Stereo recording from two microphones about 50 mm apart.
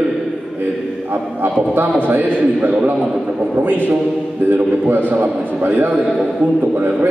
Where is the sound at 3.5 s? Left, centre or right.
Right.